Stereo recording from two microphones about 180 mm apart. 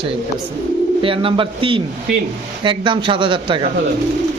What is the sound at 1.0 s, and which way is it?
Speech, 30° right (ahead or behind).